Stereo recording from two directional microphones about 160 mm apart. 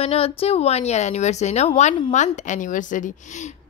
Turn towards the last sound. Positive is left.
turn(degrees=55)  # may be behind; listen again after turning